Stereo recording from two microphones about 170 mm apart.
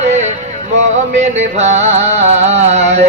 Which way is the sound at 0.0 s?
40° right (ahead or behind).